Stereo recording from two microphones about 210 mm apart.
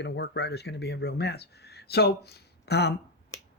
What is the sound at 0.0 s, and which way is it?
Speech, 50° left (ahead or behind).